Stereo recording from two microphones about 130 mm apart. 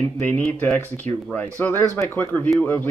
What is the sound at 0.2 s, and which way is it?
Speech, 10° left (ahead or behind).